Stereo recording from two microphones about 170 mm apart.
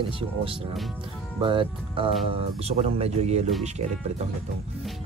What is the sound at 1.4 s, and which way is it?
Speech, 30° right (ahead or behind).